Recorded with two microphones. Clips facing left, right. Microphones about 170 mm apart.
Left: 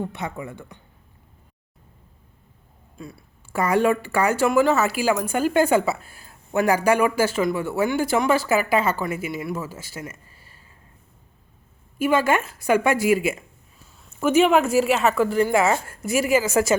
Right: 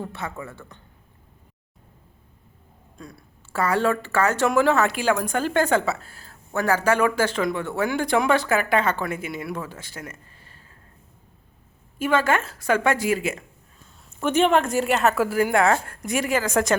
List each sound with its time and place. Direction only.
0.0 s a woman's voice: 15° left (ahead or behind)
3.0 s a sound: 5° left (ahead or behind)
3.6 s a woman's voice: 15° left (ahead or behind)
11.9 s a woman's voice: 10° left (ahead or behind)